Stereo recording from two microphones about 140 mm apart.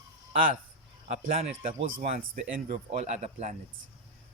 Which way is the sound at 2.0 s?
70° right (ahead or behind).